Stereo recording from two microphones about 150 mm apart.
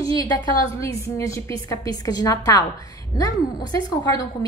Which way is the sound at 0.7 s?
20° left (ahead or behind).